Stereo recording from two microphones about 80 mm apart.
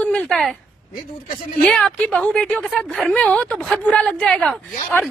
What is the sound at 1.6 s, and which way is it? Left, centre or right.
A woman's voice, centre.